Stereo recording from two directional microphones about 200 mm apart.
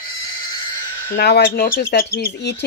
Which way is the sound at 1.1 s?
55° left (ahead or behind).